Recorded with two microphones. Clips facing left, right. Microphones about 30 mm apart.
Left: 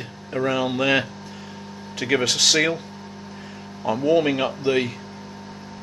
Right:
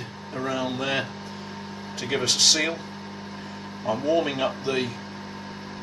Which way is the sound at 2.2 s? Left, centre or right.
Left.